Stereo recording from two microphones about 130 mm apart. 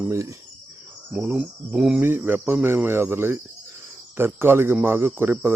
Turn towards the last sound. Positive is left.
turn(degrees=-15)  # may be behind; listen again after turning